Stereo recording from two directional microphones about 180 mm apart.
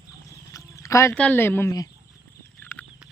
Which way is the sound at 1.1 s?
5° left (ahead or behind).